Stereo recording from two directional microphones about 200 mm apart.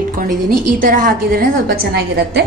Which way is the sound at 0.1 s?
45° right (ahead or behind).